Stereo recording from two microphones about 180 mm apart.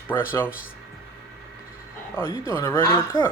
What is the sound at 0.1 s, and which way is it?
Speech, 15° left (ahead or behind).